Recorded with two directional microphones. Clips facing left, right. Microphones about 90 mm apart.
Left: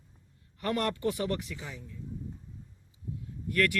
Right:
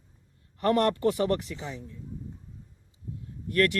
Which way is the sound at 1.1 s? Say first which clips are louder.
Right 6 dB; 40° right (ahead or behind).